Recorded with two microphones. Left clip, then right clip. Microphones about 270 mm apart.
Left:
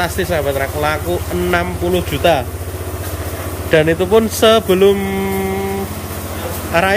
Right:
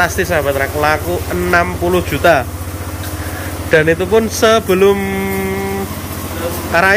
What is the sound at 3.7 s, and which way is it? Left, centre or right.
Speech, centre.